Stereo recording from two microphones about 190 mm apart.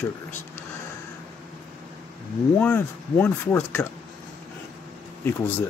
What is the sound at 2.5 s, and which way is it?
Speech, 10° left (ahead or behind).